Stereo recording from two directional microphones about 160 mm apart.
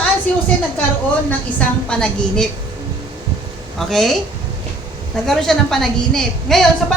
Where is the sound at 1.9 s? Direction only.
5° left (ahead or behind).